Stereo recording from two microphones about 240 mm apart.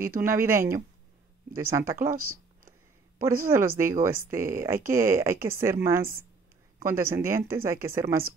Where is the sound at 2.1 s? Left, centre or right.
Right.